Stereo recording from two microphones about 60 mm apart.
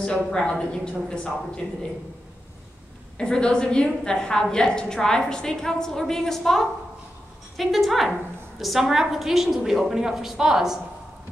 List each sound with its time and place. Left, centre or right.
0.0 s a woman's voice: centre
3.2 s a woman's voice: centre